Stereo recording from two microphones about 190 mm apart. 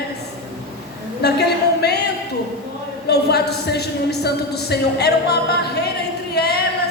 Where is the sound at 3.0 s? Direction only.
60° left (ahead or behind).